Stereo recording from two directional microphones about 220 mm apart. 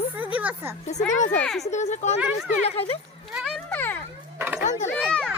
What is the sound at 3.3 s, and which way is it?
Children playing, centre (ahead or behind).